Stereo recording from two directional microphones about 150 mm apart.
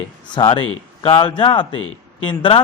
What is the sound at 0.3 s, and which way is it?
A man's voice, 35° left (ahead or behind).